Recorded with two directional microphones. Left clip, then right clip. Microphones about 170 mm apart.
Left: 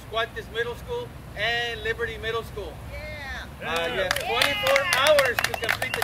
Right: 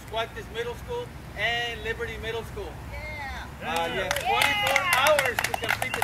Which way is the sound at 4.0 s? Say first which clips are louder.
Even; 15° left (ahead or behind).